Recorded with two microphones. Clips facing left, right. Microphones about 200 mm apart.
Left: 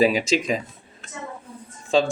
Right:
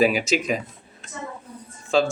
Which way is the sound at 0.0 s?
30° left (ahead or behind).